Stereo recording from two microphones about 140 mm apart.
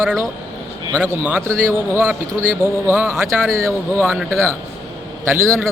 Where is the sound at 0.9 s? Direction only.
15° left (ahead or behind).